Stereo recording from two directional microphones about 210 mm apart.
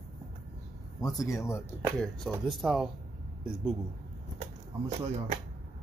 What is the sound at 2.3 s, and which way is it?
Speech, centre (ahead or behind).